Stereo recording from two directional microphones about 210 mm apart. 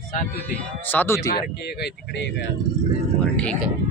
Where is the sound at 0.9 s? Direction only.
10° left (ahead or behind).